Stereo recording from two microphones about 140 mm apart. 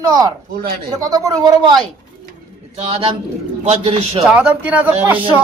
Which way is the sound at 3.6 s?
45° right (ahead or behind).